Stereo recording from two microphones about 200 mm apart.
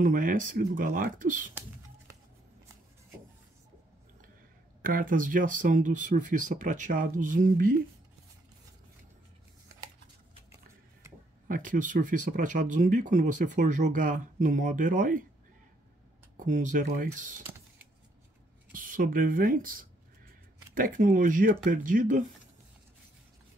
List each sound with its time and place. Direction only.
0.0 s speech: 40° right (ahead or behind)
4.8 s speech: 45° right (ahead or behind)
11.4 s speech: 45° right (ahead or behind)
16.4 s speech: 40° right (ahead or behind)
17.4 s computer keyboard: 10° right (ahead or behind)
18.7 s speech: 45° right (ahead or behind)